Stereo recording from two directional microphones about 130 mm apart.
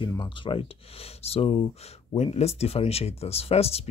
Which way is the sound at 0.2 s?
40° left (ahead or behind).